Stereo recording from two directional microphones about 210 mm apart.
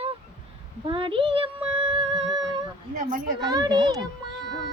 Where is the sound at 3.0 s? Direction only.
35° right (ahead or behind).